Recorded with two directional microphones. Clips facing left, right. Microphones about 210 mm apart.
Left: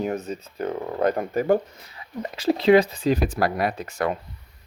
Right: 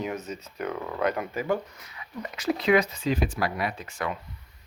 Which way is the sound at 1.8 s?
30° left (ahead or behind).